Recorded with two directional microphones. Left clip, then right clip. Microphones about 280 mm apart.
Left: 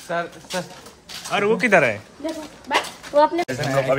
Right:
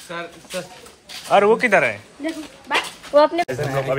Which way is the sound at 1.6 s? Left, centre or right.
Centre.